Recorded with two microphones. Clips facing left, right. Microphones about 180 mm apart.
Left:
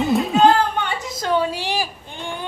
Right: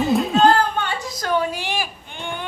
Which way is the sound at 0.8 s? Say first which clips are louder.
Left 1 dB; 25° left (ahead or behind).